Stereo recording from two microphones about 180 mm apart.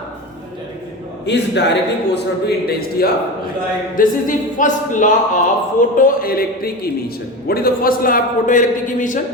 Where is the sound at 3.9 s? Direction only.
45° left (ahead or behind).